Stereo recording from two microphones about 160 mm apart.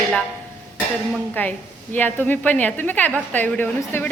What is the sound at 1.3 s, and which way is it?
A woman's voice, 10° left (ahead or behind).